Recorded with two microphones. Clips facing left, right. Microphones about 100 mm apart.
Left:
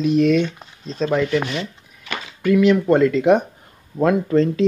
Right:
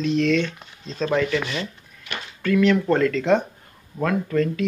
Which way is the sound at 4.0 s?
25° left (ahead or behind).